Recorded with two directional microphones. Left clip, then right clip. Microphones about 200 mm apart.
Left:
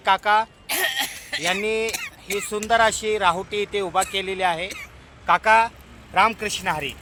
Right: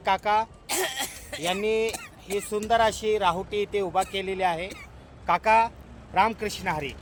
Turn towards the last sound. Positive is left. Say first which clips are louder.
# left 4 dB
turn(degrees=15)  # may be behind; listen again after turning